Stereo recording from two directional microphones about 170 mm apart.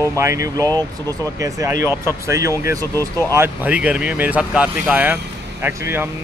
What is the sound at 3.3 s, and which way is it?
Speech, 10° right (ahead or behind).